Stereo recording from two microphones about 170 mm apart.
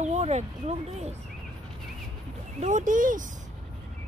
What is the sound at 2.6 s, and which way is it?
Speech, 45° right (ahead or behind).